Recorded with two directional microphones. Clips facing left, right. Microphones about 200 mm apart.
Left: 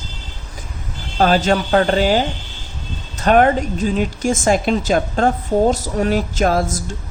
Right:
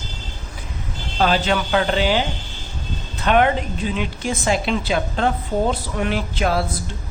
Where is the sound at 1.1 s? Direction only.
45° left (ahead or behind).